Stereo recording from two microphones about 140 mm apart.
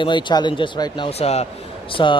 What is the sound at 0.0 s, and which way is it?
A man's voice, 35° left (ahead or behind).